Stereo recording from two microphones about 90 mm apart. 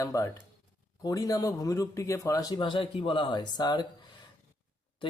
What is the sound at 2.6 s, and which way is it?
Speech, 70° left (ahead or behind).